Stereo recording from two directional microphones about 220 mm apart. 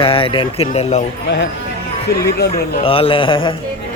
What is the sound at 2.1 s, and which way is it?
Speech, 45° left (ahead or behind).